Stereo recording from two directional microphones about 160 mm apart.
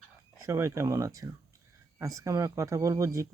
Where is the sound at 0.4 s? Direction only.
15° right (ahead or behind).